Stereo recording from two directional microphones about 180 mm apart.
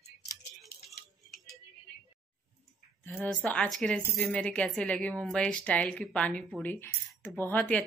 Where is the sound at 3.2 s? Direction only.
10° left (ahead or behind).